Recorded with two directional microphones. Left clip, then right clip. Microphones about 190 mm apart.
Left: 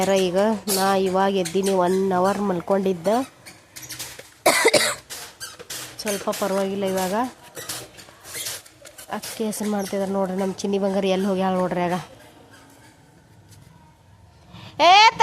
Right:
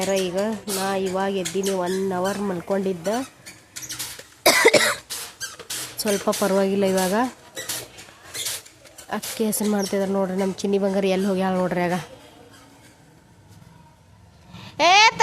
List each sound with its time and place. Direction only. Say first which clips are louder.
0.1 s speech: left 4 dB; 15° left (ahead or behind)
4.4 s cough: right 2 dB; 5° right (ahead or behind)
5.6 s speech: right 3 dB; 15° right (ahead or behind)
9.0 s speech: right 2 dB; 5° right (ahead or behind)
14.5 s a sound: left 2 dB; centre (ahead or behind)